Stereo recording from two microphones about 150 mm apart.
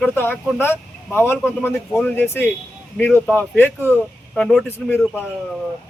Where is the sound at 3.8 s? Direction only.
10° right (ahead or behind).